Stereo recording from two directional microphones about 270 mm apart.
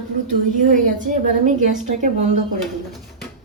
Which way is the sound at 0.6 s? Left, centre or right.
Right.